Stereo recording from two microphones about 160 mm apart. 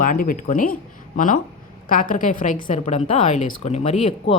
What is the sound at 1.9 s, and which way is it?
Speech, 55° left (ahead or behind).